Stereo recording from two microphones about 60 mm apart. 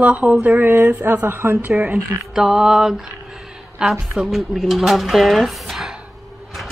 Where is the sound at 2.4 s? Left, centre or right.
Centre.